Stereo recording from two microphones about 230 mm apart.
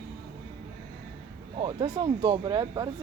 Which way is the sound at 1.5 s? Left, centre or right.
Right.